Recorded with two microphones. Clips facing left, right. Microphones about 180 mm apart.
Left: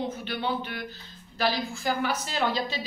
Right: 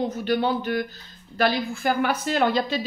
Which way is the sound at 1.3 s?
55° right (ahead or behind).